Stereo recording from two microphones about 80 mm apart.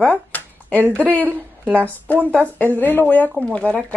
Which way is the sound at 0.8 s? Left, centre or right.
Right.